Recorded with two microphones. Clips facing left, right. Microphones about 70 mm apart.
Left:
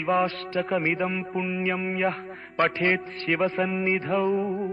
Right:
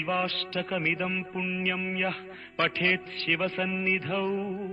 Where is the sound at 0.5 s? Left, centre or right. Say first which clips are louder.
Left 6 dB; left.